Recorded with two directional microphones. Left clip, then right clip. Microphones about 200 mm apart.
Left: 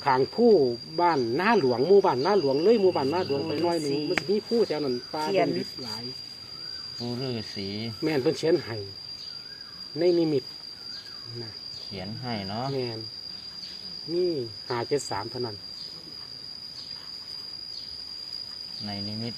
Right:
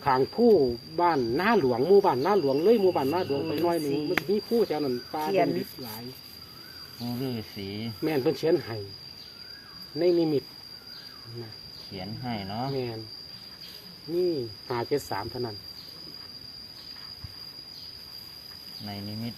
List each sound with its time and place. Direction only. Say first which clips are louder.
0.0 s speech: left 1 dB; 15° left (ahead or behind)
7.2 s speech: left 2 dB; 50° left (ahead or behind)
8.0 s speech: left 1 dB; 10° left (ahead or behind)
10.0 s speech: left 1 dB; 5° left (ahead or behind)
11.9 s speech: even; 55° left (ahead or behind)
12.7 s speech: left 1 dB; 5° left (ahead or behind)
14.2 s speech: even; 5° left (ahead or behind)